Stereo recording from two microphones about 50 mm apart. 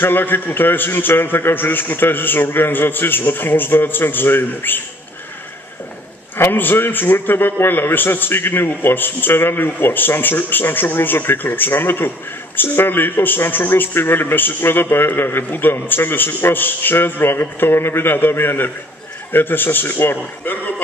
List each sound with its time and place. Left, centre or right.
0.0 s a man's voice: left
6.3 s a man's voice: left